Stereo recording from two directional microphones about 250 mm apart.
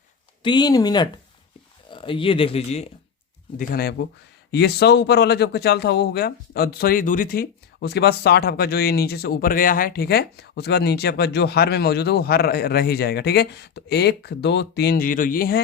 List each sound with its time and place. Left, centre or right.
0.4 s speech: centre
3.6 s speech: left